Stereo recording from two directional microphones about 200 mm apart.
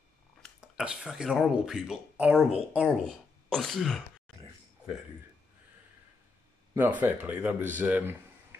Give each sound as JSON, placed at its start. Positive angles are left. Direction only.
{"t": 0.4, "sound": "speech", "side_deg": -5}
{"t": 6.7, "sound": "speech", "side_deg": -10}